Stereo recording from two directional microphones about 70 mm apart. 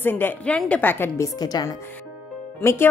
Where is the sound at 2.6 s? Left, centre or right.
Left.